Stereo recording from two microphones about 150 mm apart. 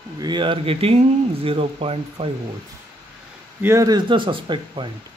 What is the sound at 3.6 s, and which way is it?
Speech, 20° right (ahead or behind).